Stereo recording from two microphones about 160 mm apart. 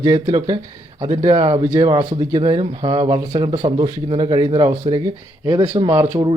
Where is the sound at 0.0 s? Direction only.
25° right (ahead or behind).